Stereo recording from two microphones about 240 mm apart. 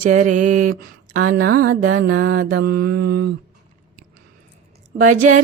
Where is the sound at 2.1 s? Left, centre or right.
Right.